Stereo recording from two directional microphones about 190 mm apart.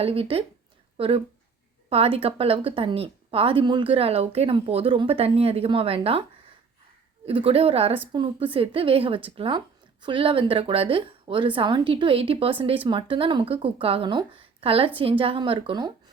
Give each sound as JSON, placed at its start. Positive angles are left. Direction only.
{"t": 0.0, "sound": "speech", "side_deg": -30}
{"t": 7.3, "sound": "a woman's voice", "side_deg": -30}